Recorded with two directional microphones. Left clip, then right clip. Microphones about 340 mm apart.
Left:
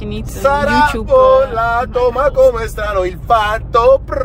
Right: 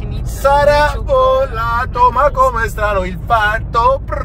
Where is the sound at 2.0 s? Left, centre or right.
Left.